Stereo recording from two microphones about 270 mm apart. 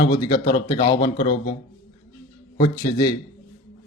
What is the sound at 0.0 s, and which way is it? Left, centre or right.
Speech, centre.